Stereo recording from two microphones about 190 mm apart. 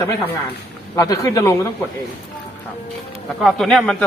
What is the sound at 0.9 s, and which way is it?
Speech, 20° left (ahead or behind).